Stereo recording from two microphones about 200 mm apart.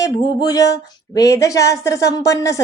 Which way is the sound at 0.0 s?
15° left (ahead or behind).